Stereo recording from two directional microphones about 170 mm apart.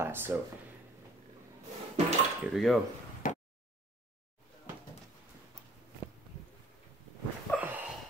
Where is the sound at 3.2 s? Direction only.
55° left (ahead or behind).